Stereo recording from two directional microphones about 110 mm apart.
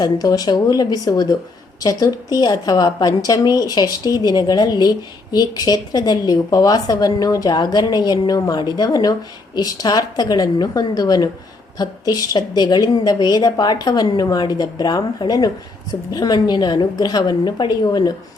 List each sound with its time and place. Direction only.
0.0 s a woman's voice: 35° left (ahead or behind)